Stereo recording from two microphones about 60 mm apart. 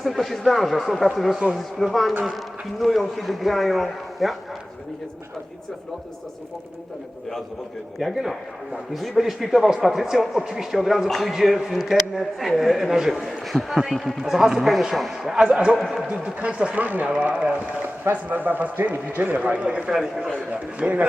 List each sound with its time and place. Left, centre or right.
0.0 s speech: centre
7.9 s speech: centre
15.4 s a man's voice: centre
20.5 s speech: right